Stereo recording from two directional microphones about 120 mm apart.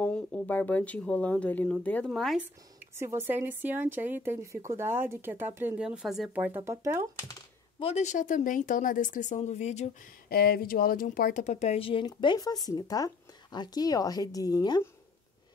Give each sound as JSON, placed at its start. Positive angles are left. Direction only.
{"t": 0.0, "sound": "speech", "side_deg": 10}
{"t": 2.0, "sound": "speech", "side_deg": 0}
{"t": 3.0, "sound": "a woman's voice", "side_deg": -20}
{"t": 5.9, "sound": "speech", "side_deg": -5}
{"t": 6.3, "sound": "speech", "side_deg": -15}
{"t": 7.8, "sound": "speech", "side_deg": 70}
{"t": 11.1, "sound": "speech", "side_deg": 85}
{"t": 12.1, "sound": "speech", "side_deg": 35}